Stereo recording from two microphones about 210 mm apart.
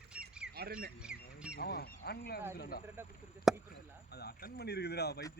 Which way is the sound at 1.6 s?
50° left (ahead or behind).